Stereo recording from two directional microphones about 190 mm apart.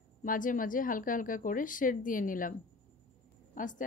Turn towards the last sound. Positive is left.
turn(degrees=45)  # may be behind; listen again after turning